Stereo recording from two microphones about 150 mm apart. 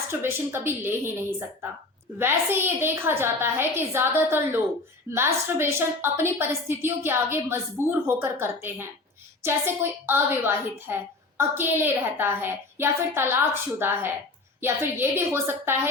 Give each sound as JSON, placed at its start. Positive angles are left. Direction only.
{"t": 0.1, "sound": "a woman's voice", "side_deg": -15}